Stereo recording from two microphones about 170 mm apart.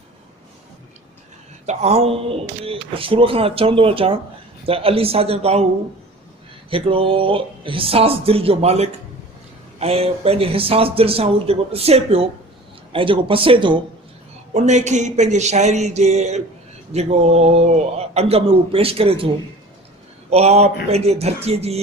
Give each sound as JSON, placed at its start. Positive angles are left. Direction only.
{"t": 1.6, "sound": "speech", "side_deg": -40}
{"t": 6.7, "sound": "speech", "side_deg": -30}
{"t": 14.5, "sound": "speech", "side_deg": -45}
{"t": 20.3, "sound": "speech", "side_deg": -40}